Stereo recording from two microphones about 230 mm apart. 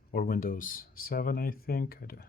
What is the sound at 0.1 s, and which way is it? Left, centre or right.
Speech, left.